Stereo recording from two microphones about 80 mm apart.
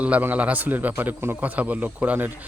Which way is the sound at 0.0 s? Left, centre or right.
Right.